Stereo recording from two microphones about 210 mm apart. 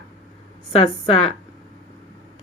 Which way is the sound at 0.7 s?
25° left (ahead or behind).